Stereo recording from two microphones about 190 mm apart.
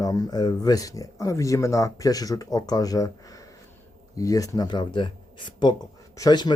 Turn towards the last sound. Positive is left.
turn(degrees=20)  # may be behind; listen again after turning